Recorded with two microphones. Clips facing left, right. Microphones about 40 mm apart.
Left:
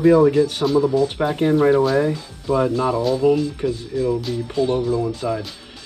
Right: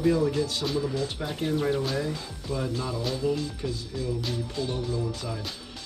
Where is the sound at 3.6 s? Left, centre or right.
Left.